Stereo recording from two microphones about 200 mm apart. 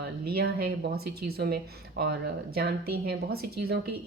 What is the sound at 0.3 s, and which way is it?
A woman's voice, 50° right (ahead or behind).